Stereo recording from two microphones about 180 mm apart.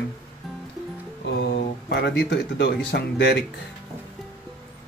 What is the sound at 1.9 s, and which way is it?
Speech, 65° left (ahead or behind).